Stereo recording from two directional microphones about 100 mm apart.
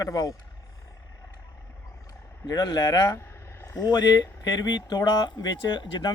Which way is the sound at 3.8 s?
45° left (ahead or behind).